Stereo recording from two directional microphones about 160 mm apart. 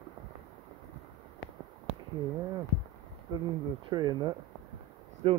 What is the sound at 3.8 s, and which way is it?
Speech, 25° right (ahead or behind).